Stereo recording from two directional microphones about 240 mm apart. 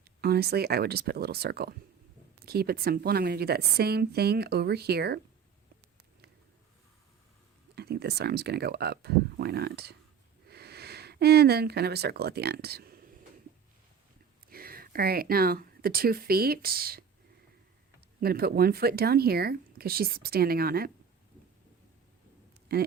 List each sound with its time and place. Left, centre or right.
0.2 s speech: right
7.8 s speech: right
14.5 s speech: right
18.2 s speech: right
22.7 s speech: right